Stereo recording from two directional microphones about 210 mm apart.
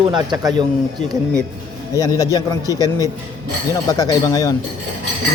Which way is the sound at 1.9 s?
15° left (ahead or behind).